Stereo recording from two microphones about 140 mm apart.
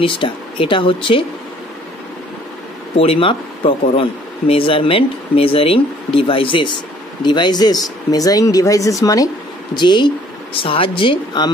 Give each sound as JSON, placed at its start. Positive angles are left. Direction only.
{"t": 0.0, "sound": "speech", "side_deg": 40}
{"t": 3.0, "sound": "speech", "side_deg": 40}